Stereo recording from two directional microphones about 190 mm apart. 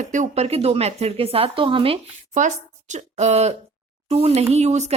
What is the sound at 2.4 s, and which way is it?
A woman's voice, 40° right (ahead or behind).